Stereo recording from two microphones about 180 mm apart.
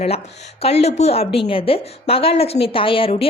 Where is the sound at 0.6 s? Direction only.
35° left (ahead or behind).